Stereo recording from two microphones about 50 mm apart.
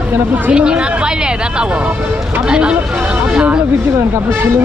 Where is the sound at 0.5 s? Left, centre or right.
Centre.